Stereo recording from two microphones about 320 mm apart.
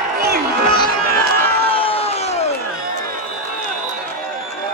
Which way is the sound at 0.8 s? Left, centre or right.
Centre.